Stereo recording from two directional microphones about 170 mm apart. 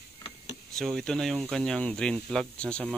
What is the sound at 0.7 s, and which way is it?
Speech, centre (ahead or behind).